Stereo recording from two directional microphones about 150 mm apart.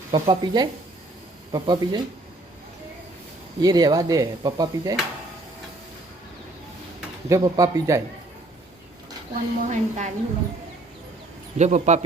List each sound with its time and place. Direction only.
0.1 s speech: 30° right (ahead or behind)
3.6 s speech: 25° right (ahead or behind)
7.3 s speech: 20° right (ahead or behind)
9.3 s a woman's voice: 55° right (ahead or behind)
11.5 s a woman's voice: 50° right (ahead or behind)